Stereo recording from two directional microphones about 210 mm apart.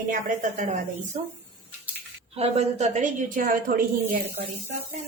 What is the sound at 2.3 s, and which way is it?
A woman's voice, 30° right (ahead or behind).